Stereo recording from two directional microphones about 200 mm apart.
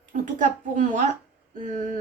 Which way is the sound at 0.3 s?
40° right (ahead or behind).